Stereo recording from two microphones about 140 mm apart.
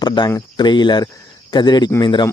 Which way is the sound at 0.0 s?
30° left (ahead or behind).